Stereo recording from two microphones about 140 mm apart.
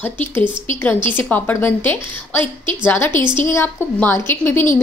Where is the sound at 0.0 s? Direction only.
15° left (ahead or behind).